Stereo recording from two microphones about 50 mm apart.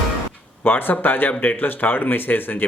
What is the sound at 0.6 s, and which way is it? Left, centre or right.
Speech, left.